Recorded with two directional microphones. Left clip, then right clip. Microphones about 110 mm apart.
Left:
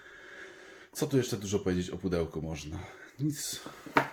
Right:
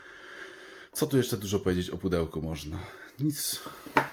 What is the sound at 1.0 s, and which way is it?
Speech, 30° right (ahead or behind).